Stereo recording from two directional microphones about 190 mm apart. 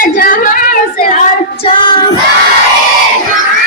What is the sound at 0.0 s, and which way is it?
Child singing, 45° left (ahead or behind).